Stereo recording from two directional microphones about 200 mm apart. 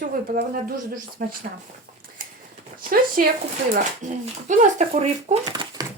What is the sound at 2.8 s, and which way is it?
Speech, 45° right (ahead or behind).